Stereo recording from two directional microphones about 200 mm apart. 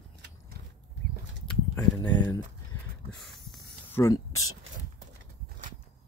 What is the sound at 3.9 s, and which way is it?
Speech, 15° left (ahead or behind).